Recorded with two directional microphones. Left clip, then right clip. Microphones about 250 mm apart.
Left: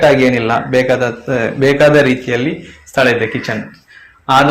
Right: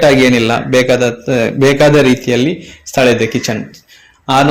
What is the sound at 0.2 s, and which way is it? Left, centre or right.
A man's voice, right.